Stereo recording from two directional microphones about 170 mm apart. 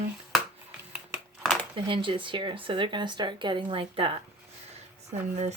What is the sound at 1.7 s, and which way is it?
Speech, 30° right (ahead or behind).